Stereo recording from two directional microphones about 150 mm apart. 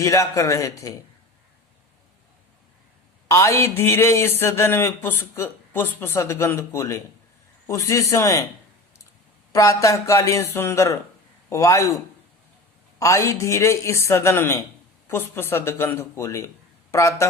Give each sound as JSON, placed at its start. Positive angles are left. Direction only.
{"t": 0.0, "sound": "a woman's voice", "side_deg": 20}
{"t": 3.2, "sound": "a woman's voice", "side_deg": 20}
{"t": 9.5, "sound": "a woman's voice", "side_deg": 20}
{"t": 13.0, "sound": "a woman's voice", "side_deg": 20}